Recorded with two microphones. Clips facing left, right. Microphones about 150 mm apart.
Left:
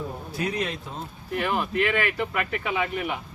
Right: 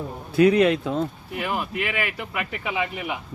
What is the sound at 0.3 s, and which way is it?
Speech, 60° right (ahead or behind).